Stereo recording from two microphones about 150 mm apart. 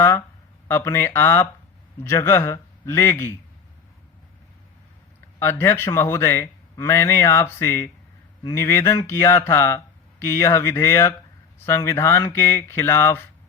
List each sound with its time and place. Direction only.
0.7 s speech: 15° left (ahead or behind)
5.4 s speech: 15° left (ahead or behind)